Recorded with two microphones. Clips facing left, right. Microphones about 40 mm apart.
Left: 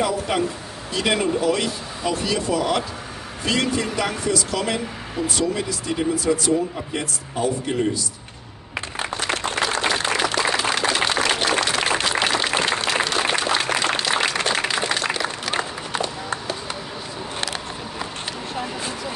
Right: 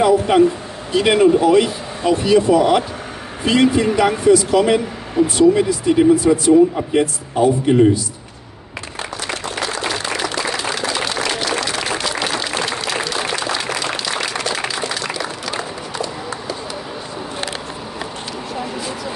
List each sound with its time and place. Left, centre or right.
0.3 s speech: right
9.8 s applause: left
10.6 s a sound: left
12.6 s applause: left
14.4 s a sound: left
15.5 s run: left